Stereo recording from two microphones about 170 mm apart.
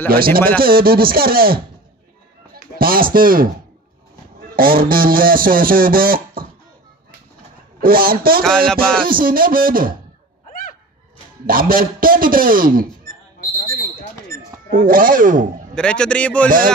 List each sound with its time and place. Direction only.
0.1 s speech: 60° right (ahead or behind)
4.6 s speech: 60° right (ahead or behind)
7.8 s speech: 60° right (ahead or behind)
8.5 s music: 5° left (ahead or behind)
9.0 s speech: 55° right (ahead or behind)
10.5 s a sound: 55° left (ahead or behind)
11.4 s speech: 55° right (ahead or behind)
14.3 s speech: 55° right (ahead or behind)
15.7 s a man's voice: 5° left (ahead or behind)
16.4 s speech: 55° right (ahead or behind)